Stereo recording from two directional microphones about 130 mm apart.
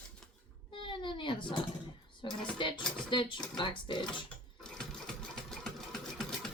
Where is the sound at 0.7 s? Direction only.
40° left (ahead or behind).